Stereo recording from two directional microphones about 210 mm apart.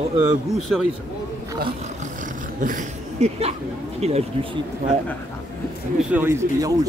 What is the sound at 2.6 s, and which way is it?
Speech, 35° right (ahead or behind).